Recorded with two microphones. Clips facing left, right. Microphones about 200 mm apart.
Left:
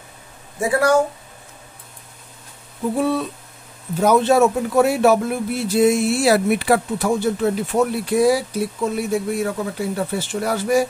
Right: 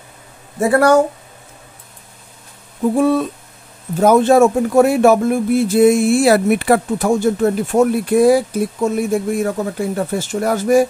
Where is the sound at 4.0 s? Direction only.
50° right (ahead or behind).